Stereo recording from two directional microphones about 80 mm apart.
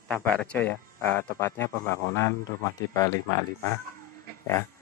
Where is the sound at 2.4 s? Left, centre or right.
Left.